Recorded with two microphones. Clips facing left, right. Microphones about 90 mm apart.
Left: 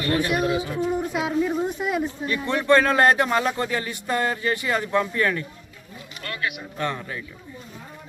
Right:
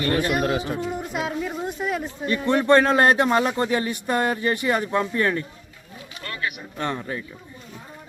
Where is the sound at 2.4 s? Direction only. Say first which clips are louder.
Right 2 dB; 20° right (ahead or behind).